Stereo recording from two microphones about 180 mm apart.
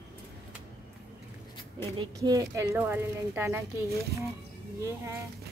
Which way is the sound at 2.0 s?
20° right (ahead or behind).